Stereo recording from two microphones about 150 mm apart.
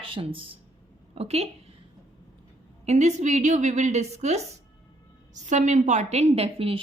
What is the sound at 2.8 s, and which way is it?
A woman's voice, 50° right (ahead or behind).